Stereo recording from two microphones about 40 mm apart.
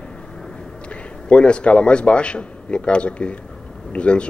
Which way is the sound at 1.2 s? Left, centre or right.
Left.